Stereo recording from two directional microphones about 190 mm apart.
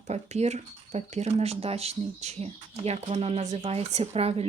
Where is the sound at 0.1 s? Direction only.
35° right (ahead or behind).